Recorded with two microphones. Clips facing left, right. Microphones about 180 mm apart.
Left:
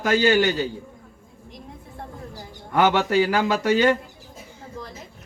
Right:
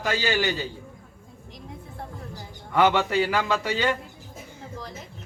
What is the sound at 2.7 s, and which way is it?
Speech, 45° left (ahead or behind).